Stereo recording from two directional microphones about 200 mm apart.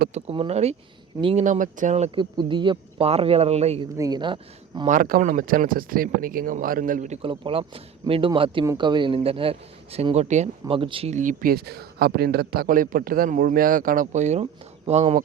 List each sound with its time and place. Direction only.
0.1 s speech: 30° right (ahead or behind)
2.1 s speech: 25° right (ahead or behind)
3.9 s speech: 20° right (ahead or behind)
4.9 s speech: 45° right (ahead or behind)